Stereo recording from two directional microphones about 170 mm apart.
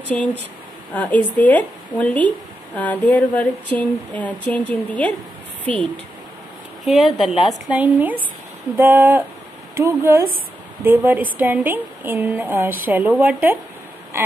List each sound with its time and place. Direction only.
0.1 s a woman's voice: 5° left (ahead or behind)
6.8 s a woman's voice: centre (ahead or behind)